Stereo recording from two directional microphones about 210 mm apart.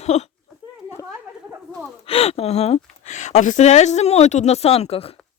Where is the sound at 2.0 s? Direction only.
30° left (ahead or behind).